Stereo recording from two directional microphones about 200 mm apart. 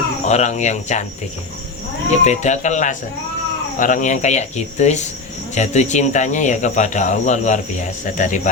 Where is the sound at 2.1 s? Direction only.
35° left (ahead or behind).